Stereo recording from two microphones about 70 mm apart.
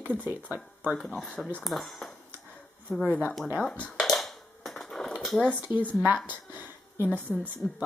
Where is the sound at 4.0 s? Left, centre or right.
Centre.